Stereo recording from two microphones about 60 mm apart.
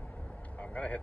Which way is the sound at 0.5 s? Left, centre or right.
Left.